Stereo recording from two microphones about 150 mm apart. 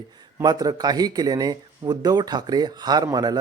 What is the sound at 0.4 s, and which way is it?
Speech, 25° right (ahead or behind).